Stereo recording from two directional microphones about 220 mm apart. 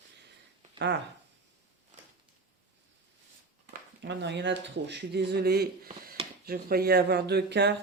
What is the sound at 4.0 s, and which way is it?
Speech, 50° right (ahead or behind).